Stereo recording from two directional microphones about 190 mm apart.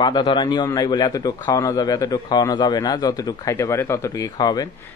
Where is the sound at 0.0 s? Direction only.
25° left (ahead or behind).